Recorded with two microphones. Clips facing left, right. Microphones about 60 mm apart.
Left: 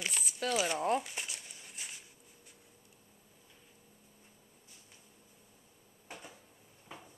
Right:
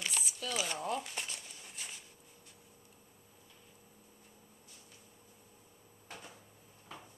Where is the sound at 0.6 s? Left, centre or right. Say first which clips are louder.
Left 4 dB; left.